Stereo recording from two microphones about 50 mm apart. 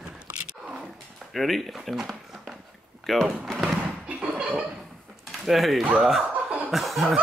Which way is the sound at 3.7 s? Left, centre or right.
Right.